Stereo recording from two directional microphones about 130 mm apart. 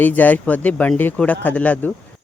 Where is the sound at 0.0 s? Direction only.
15° left (ahead or behind).